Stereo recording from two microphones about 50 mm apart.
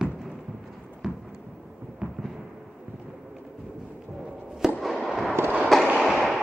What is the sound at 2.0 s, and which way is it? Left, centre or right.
Fireworks, centre.